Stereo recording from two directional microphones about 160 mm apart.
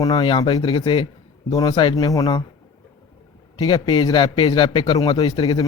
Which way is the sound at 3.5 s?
25° left (ahead or behind).